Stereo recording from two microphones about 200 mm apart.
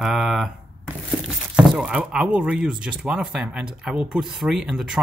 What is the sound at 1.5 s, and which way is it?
Speech, 5° right (ahead or behind).